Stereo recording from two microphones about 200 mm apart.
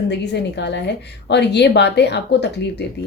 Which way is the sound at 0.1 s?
60° left (ahead or behind).